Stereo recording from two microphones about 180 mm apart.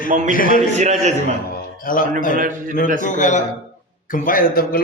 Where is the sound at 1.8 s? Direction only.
50° left (ahead or behind).